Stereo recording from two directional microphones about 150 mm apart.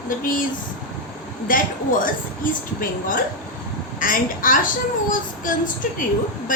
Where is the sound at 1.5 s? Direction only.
65° left (ahead or behind).